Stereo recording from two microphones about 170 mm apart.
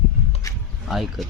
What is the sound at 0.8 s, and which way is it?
Speech, centre (ahead or behind).